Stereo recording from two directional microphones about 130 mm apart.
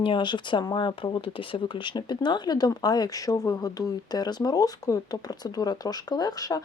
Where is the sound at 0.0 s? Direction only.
40° left (ahead or behind).